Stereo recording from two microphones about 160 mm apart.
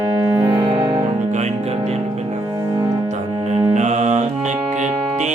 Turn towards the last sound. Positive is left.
turn(degrees=-45)  # may be behind; listen again after turning